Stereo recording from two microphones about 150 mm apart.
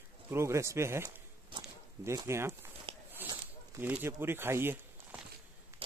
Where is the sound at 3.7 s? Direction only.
15° right (ahead or behind).